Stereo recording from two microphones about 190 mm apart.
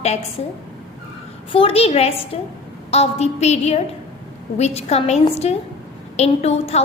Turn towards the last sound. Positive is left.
turn(degrees=35)  # may be behind; listen again after turning